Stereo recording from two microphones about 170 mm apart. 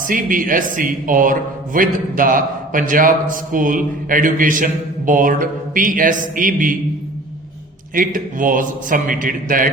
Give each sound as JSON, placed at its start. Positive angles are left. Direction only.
{"t": 0.1, "sound": "a man's voice", "side_deg": -55}
{"t": 7.9, "sound": "a man's voice", "side_deg": -50}